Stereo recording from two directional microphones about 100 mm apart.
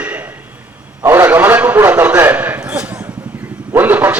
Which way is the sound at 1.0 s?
20° right (ahead or behind).